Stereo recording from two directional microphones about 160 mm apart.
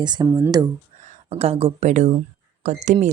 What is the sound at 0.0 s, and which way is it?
Speech, 30° right (ahead or behind).